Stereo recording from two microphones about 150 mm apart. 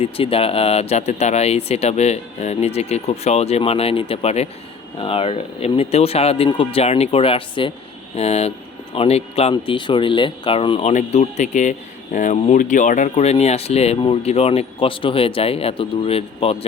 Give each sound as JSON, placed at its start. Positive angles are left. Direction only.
{"t": 0.0, "sound": "speech", "side_deg": 40}
{"t": 10.9, "sound": "speech", "side_deg": 50}